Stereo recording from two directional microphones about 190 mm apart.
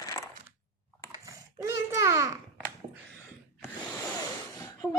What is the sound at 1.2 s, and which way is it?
Babbling, 15° right (ahead or behind).